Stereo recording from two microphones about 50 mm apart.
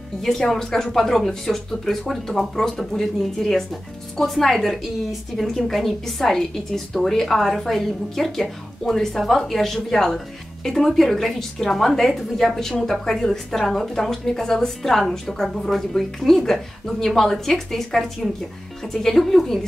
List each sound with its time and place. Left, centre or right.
0.2 s a woman's voice: centre